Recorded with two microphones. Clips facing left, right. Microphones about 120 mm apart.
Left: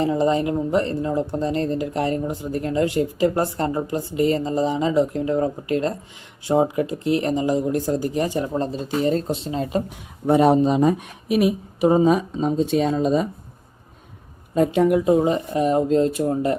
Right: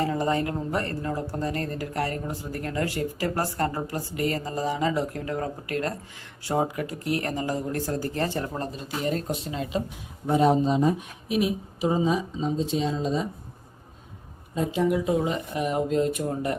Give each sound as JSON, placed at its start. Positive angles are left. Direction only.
{"t": 0.0, "sound": "speech", "side_deg": 20}
{"t": 8.5, "sound": "speech", "side_deg": 30}
{"t": 10.2, "sound": "speech", "side_deg": 65}
{"t": 14.5, "sound": "speech", "side_deg": 65}
{"t": 15.0, "sound": "speech", "side_deg": 35}